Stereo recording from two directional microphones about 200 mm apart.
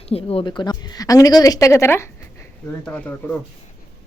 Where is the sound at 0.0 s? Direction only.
30° left (ahead or behind); by 3.3 s 5° left (ahead or behind).